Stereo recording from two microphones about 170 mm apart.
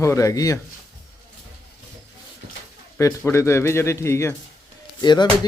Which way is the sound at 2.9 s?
15° left (ahead or behind).